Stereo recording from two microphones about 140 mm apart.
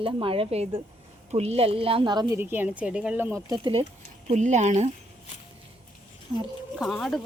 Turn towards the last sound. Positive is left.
turn(degrees=0)  # may be behind; listen again after turning